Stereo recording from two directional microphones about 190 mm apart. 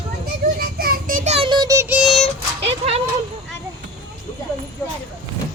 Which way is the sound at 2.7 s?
30° right (ahead or behind).